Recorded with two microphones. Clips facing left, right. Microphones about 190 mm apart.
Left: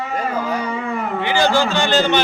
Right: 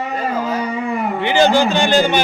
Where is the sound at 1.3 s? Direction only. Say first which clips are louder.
Right 4 dB; 20° right (ahead or behind).